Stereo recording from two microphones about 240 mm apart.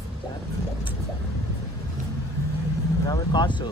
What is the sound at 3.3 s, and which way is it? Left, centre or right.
Speech, centre.